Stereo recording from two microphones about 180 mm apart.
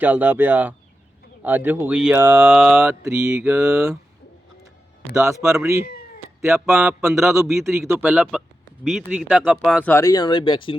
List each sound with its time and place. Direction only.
0.0 s mantra: 10° right (ahead or behind)
5.1 s mantra: 15° right (ahead or behind)
8.9 s speech: centre (ahead or behind)
9.9 s speech: 20° left (ahead or behind)